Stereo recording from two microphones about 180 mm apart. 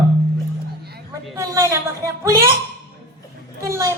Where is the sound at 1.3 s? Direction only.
15° right (ahead or behind).